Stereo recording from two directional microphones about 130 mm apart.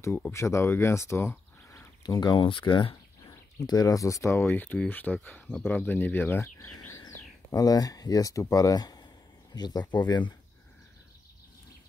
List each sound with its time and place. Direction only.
0.3 s speech: 20° left (ahead or behind)
2.0 s speech: 30° left (ahead or behind); by 6.9 s 15° left (ahead or behind)
7.5 s speech: 30° left (ahead or behind)